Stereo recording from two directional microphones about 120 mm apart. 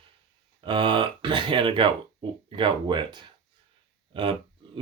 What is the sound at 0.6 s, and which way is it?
Speech, 40° right (ahead or behind).